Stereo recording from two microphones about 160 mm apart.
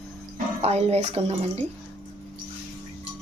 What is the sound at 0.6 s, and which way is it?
Speech, 40° right (ahead or behind).